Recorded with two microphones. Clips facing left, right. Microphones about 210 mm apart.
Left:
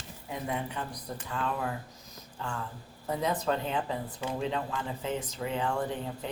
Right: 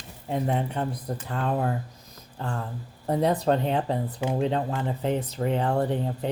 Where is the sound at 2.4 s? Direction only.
40° right (ahead or behind).